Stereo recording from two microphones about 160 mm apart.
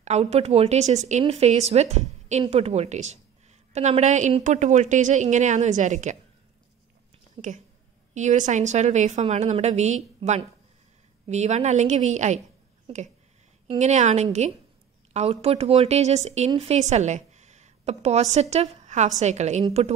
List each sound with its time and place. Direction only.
0.0 s speech: 45° right (ahead or behind)
7.4 s speech: 35° right (ahead or behind)
8.1 s speech: 50° right (ahead or behind)